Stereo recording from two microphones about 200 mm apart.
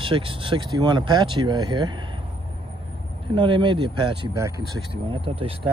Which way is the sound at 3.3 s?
25° right (ahead or behind).